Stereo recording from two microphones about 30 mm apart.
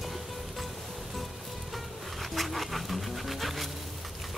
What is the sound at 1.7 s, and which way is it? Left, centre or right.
Music, centre.